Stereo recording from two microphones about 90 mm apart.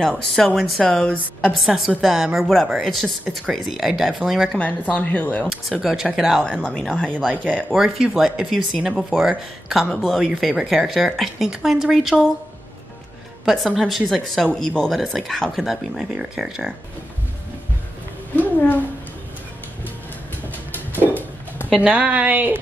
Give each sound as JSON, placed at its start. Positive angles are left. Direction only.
{"t": 0.6, "sound": "speech", "side_deg": 0}
{"t": 1.6, "sound": "speech", "side_deg": 0}
{"t": 4.6, "sound": "speech", "side_deg": 15}
{"t": 5.5, "sound": "speech", "side_deg": 0}
{"t": 6.4, "sound": "speech", "side_deg": 10}
{"t": 8.0, "sound": "speech", "side_deg": -5}
{"t": 13.5, "sound": "speech", "side_deg": 0}
{"t": 18.3, "sound": "a sound", "side_deg": 20}
{"t": 21.0, "sound": "a sound", "side_deg": 20}
{"t": 21.6, "sound": "speech", "side_deg": -10}